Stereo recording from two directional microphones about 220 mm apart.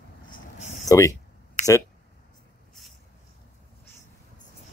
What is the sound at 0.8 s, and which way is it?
Speech, 15° left (ahead or behind).